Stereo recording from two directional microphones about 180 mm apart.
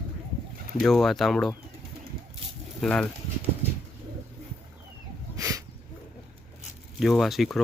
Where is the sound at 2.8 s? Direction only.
5° left (ahead or behind).